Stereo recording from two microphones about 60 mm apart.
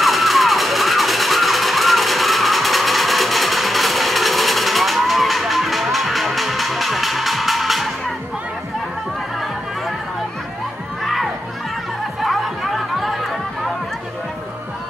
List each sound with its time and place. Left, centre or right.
0.0 s music: centre
12.2 s music: centre